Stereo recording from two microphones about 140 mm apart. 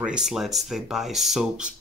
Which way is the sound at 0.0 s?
5° right (ahead or behind).